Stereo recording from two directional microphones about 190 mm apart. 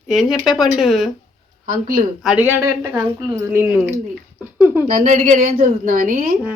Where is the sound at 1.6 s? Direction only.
45° right (ahead or behind).